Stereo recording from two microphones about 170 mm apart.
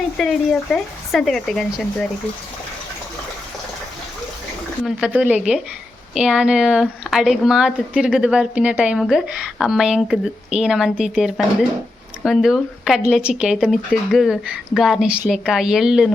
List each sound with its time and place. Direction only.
0.2 s a woman's voice: centre (ahead or behind)
4.9 s a woman's voice: 5° right (ahead or behind)